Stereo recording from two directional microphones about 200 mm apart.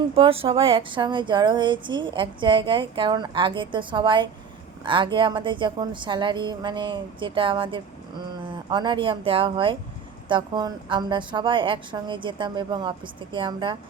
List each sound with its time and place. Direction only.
0.2 s speech: 30° right (ahead or behind)